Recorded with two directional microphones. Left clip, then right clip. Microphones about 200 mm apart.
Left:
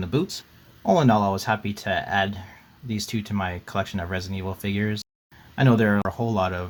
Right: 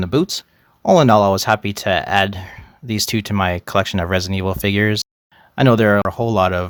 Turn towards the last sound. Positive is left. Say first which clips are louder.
# right 9 dB
turn(degrees=-45)  # may be behind; listen again after turning